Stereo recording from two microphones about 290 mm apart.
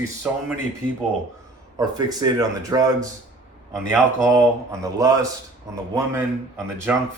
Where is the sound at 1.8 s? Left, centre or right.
Centre.